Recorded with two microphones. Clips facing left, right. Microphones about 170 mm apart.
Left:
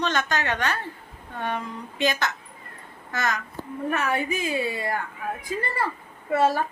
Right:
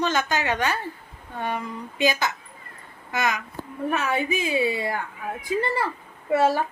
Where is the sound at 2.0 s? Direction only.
5° right (ahead or behind).